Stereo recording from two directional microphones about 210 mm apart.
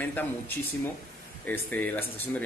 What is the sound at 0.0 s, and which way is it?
Speech, 10° left (ahead or behind).